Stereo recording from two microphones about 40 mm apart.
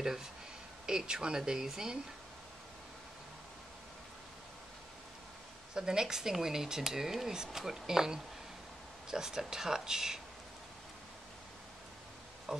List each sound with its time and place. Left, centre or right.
0.8 s speech: centre
5.8 s speech: centre
12.5 s speech: centre